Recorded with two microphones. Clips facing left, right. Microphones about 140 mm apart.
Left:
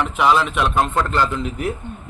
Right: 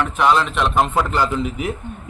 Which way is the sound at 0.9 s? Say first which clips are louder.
Right 1 dB; 10° right (ahead or behind).